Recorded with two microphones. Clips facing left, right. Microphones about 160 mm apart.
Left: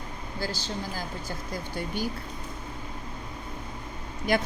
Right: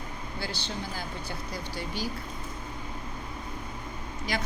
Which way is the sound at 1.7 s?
55° left (ahead or behind).